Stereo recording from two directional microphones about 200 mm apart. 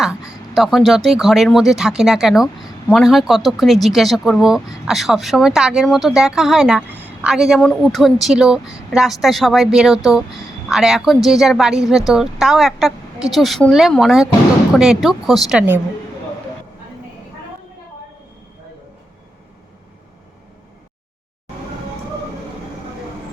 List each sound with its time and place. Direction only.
0.5 s speech: centre (ahead or behind)